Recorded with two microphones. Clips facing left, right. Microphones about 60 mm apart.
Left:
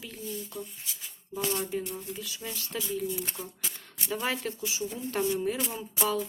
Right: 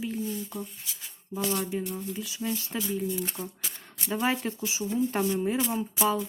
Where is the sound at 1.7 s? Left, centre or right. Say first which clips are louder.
Right 2 dB; centre.